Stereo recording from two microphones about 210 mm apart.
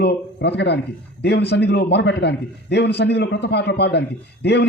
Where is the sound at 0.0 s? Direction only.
55° left (ahead or behind).